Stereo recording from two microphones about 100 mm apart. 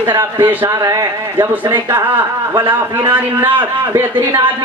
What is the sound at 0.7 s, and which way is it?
Speech, 35° right (ahead or behind).